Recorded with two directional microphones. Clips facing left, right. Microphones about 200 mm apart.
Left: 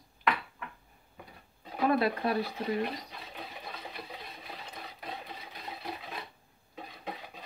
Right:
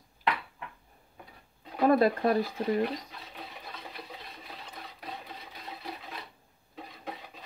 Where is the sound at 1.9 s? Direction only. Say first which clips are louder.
Right 5 dB; 45° right (ahead or behind).